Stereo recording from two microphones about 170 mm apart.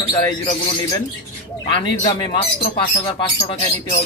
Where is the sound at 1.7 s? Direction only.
30° left (ahead or behind).